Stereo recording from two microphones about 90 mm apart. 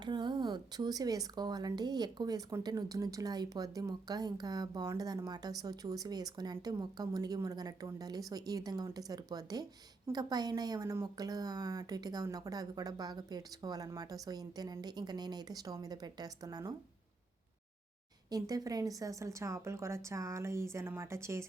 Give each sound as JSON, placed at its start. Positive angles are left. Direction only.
{"t": 0.0, "sound": "speech", "side_deg": -55}
{"t": 18.3, "sound": "a woman's voice", "side_deg": -45}